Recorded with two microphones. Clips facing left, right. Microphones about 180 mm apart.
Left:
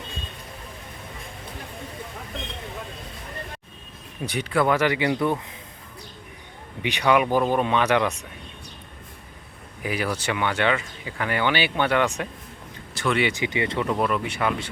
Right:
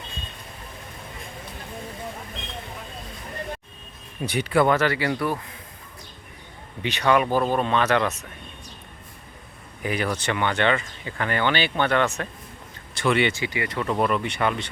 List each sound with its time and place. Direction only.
4.2 s speech: centre (ahead or behind)
4.7 s speech: 15° left (ahead or behind)
6.8 s speech: 10° left (ahead or behind)
9.8 s speech: 5° left (ahead or behind)
12.9 s speech: centre (ahead or behind)
13.3 s speech: 20° left (ahead or behind)
13.9 s speech: centre (ahead or behind)